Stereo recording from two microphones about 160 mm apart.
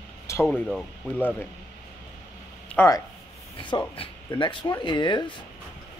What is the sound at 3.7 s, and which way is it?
Speech, 30° left (ahead or behind).